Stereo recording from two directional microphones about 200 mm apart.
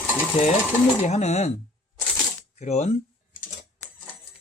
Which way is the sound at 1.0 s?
35° left (ahead or behind).